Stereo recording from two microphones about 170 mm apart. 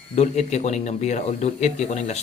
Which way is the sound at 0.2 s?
40° left (ahead or behind).